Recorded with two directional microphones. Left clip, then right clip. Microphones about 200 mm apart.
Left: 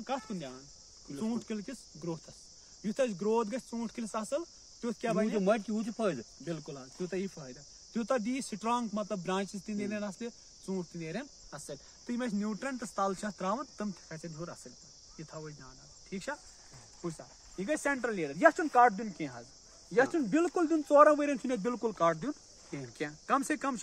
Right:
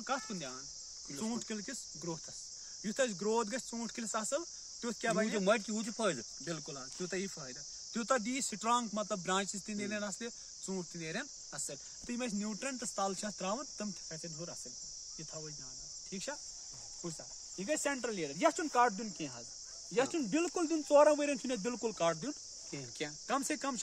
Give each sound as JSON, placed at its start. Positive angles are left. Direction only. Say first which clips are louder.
{"t": 0.0, "sound": "cricket", "louder": "left 1 dB", "side_deg": -5}
{"t": 17.6, "sound": "cricket", "louder": "left 4 dB", "side_deg": -15}
{"t": 19.9, "sound": "speech", "louder": "left 5 dB", "side_deg": -15}
{"t": 22.9, "sound": "cricket", "louder": "left 5 dB", "side_deg": -10}